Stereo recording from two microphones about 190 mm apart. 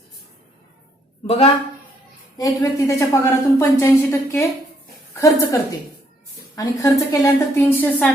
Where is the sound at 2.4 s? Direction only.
15° left (ahead or behind).